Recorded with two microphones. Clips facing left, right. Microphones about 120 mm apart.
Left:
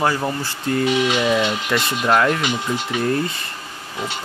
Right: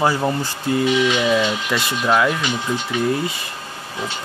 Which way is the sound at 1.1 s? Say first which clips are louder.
Even; centre (ahead or behind).